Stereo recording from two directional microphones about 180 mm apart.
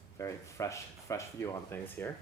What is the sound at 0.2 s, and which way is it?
Speech, 15° left (ahead or behind).